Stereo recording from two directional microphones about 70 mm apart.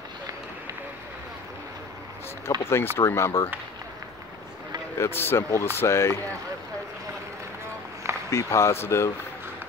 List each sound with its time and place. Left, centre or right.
2.6 s speech: left
4.9 s speech: left
8.3 s speech: left